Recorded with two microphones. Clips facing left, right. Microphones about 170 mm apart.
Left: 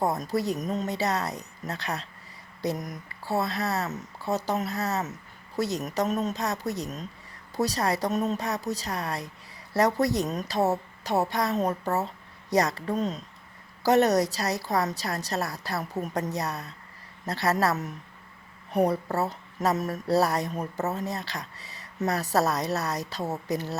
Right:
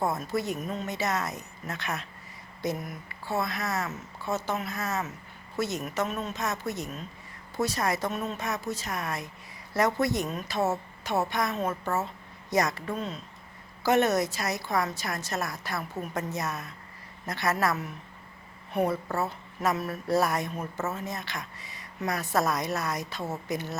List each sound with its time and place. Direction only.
0.0 s speech: 35° left (ahead or behind)